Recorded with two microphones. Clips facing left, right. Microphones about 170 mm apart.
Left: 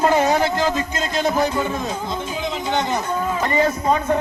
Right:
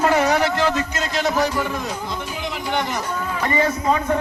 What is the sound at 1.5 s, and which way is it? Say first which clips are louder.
Speech: left 1 dB; 20° left (ahead or behind).